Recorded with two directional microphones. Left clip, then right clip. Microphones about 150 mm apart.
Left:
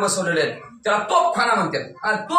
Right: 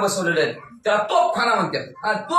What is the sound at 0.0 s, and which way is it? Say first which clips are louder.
A man's voice: even; 20° left (ahead or behind).